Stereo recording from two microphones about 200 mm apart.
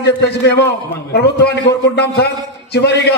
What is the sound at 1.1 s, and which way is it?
A man's voice, 55° left (ahead or behind).